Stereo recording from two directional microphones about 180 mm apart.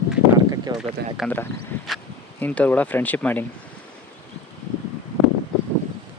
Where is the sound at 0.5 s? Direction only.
20° right (ahead or behind).